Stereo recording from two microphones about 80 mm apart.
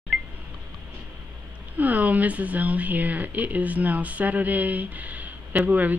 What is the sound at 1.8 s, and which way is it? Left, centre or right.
Speech, right.